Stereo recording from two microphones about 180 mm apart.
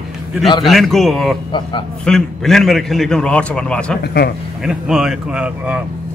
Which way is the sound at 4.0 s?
60° left (ahead or behind).